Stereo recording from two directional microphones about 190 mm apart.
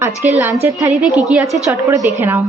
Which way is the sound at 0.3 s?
10° right (ahead or behind).